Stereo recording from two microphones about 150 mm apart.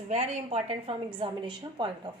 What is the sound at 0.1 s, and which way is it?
A woman's voice, 50° right (ahead or behind).